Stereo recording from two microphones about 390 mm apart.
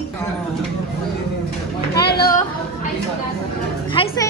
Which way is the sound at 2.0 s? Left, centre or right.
Left.